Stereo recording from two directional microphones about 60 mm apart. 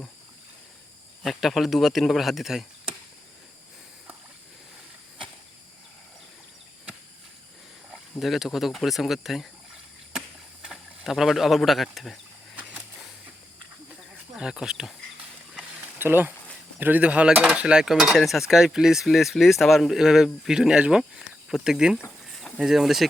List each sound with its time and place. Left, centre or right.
1.2 s speech: centre
8.2 s speech: centre
10.1 s a sound: centre
14.3 s speech: centre
16.0 s speech: right
16.8 s speech: right
22.3 s a sound: centre
22.5 s speech: centre